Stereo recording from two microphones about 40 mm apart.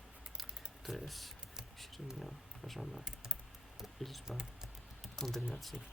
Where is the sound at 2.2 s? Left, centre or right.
Centre.